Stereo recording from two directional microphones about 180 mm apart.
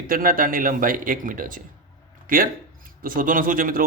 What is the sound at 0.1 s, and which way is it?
Mantra, 50° right (ahead or behind).